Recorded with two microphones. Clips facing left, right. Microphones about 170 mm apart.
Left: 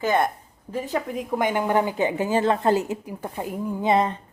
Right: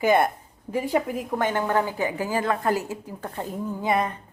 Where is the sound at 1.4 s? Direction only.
15° left (ahead or behind).